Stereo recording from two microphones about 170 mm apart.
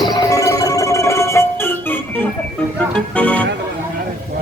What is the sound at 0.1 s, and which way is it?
Music, 20° left (ahead or behind).